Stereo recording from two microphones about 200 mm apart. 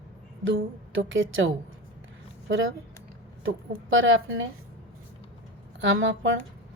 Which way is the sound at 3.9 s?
80° right.